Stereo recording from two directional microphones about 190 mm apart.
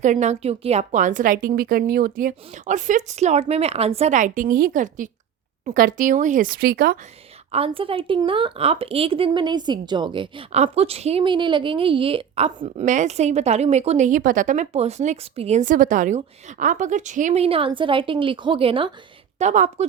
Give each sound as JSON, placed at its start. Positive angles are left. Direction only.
{"t": 0.0, "sound": "a woman's voice", "side_deg": -40}
{"t": 7.5, "sound": "a woman's voice", "side_deg": -30}
{"t": 19.4, "sound": "a woman's voice", "side_deg": -40}